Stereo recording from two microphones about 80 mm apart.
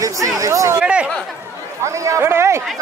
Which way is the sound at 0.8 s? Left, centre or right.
Centre.